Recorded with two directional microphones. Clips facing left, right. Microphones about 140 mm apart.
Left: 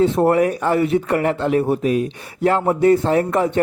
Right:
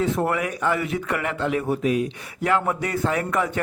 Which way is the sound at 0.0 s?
30° left (ahead or behind).